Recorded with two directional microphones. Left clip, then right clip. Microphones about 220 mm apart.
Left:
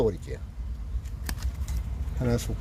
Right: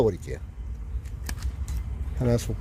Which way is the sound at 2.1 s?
40° right (ahead or behind).